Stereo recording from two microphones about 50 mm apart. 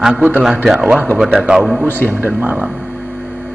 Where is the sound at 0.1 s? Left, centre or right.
Right.